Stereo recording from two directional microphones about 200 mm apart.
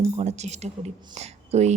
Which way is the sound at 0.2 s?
35° right (ahead or behind).